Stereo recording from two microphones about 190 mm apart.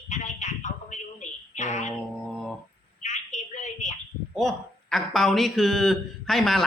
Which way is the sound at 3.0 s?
40° left (ahead or behind).